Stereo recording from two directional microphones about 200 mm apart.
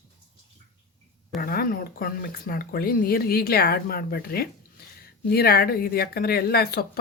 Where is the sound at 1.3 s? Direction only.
45° left (ahead or behind).